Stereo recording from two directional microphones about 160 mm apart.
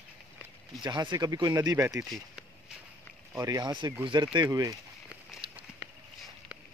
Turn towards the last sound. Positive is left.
turn(degrees=-30)  # may be behind; listen again after turning